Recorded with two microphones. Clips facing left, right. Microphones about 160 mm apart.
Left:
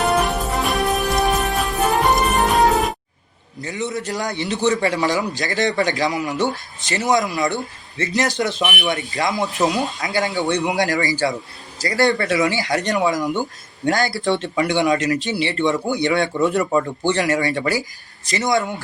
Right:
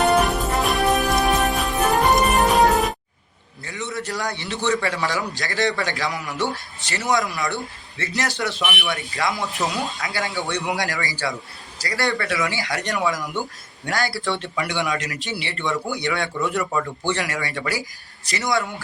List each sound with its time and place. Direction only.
0.0 s music: centre (ahead or behind)
3.6 s a man's voice: 20° left (ahead or behind)
4.5 s a man's voice: 40° left (ahead or behind)
4.9 s speech: 20° left (ahead or behind)